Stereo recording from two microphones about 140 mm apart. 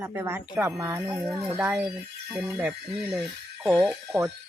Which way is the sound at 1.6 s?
5° right (ahead or behind).